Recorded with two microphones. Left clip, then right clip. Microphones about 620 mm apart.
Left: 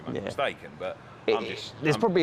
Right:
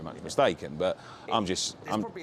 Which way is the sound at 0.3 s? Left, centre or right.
Right.